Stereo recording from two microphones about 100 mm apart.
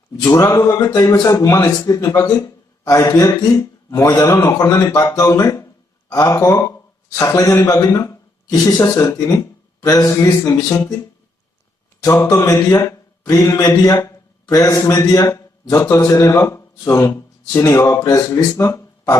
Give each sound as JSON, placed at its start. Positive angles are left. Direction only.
{"t": 0.2, "sound": "a man's voice", "side_deg": 30}
{"t": 12.0, "sound": "a man's voice", "side_deg": 35}
{"t": 18.5, "sound": "a sound", "side_deg": 30}